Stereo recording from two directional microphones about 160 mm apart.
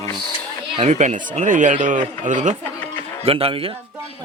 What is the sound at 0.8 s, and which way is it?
Speech, 45° right (ahead or behind).